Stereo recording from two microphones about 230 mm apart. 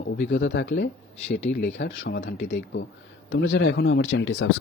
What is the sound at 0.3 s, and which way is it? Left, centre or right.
Speech, left.